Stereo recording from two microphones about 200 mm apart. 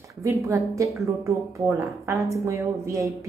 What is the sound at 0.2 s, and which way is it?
A woman's voice, 15° right (ahead or behind).